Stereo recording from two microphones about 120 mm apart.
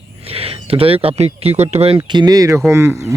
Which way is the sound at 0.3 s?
55° right (ahead or behind).